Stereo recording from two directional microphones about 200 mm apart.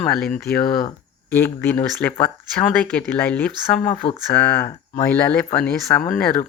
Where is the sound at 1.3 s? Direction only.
10° left (ahead or behind).